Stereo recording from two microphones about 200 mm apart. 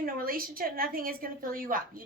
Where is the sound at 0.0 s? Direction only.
45° right (ahead or behind).